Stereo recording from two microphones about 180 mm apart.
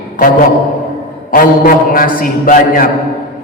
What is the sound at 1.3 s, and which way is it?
Mantra, 50° left (ahead or behind).